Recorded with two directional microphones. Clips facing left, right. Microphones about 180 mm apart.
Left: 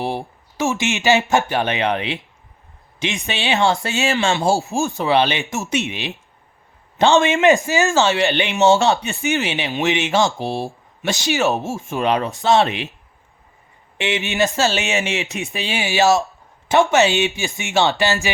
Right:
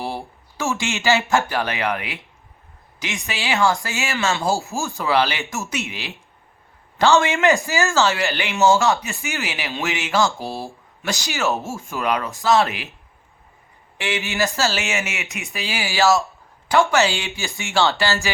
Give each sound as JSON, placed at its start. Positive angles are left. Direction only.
{"t": 0.0, "sound": "speech", "side_deg": 20}
{"t": 3.8, "sound": "speech", "side_deg": 35}
{"t": 8.8, "sound": "speech", "side_deg": 35}
{"t": 14.0, "sound": "speech", "side_deg": 20}
{"t": 15.5, "sound": "speech", "side_deg": 20}